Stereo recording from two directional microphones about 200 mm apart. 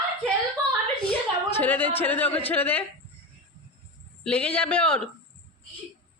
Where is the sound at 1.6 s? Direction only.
10° left (ahead or behind).